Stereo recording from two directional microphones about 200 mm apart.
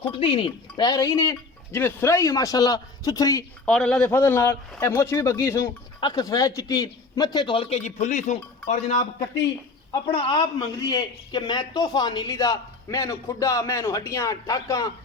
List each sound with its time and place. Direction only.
0.0 s speech: 25° left (ahead or behind)
3.7 s a man's voice: 5° left (ahead or behind); by 9.0 s 35° left (ahead or behind)
9.9 s a man's voice: 25° left (ahead or behind)